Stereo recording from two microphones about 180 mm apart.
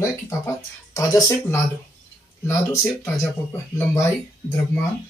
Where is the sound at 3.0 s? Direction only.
10° left (ahead or behind).